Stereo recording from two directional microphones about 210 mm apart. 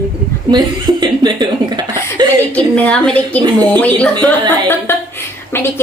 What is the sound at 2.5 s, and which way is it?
A woman's voice, 5° left (ahead or behind).